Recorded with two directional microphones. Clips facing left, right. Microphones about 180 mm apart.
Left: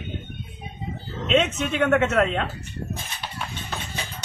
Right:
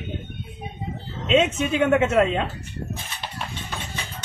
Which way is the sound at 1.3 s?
10° right (ahead or behind).